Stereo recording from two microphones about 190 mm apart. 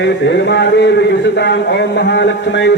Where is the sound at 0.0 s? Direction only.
65° left (ahead or behind).